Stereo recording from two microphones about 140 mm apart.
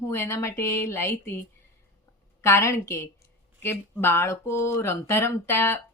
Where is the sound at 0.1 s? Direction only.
20° left (ahead or behind).